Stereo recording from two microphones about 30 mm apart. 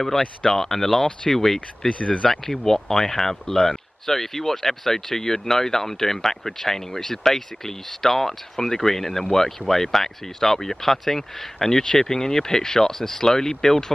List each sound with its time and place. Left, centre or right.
0.4 s speech: centre
1.9 s speech: left
2.2 s speech: centre